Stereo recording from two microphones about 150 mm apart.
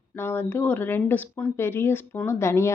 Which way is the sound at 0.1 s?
15° left (ahead or behind).